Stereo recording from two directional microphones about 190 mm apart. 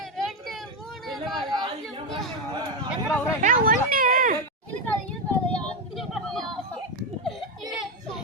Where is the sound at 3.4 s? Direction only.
45° right (ahead or behind).